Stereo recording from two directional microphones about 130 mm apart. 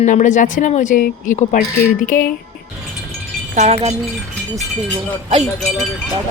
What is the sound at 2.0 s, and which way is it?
Speech, 90° left.